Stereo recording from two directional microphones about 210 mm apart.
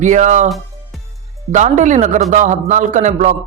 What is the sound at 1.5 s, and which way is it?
Speech, 35° right (ahead or behind).